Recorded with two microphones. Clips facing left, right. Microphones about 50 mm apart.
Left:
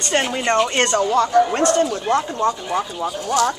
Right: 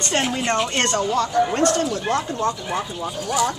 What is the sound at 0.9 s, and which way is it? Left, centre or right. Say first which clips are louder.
Speech: left 5 dB; left.